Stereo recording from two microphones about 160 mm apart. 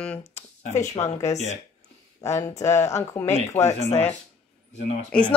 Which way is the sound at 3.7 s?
45° left (ahead or behind).